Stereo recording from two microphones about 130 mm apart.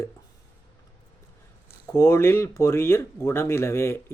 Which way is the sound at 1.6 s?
20° left (ahead or behind).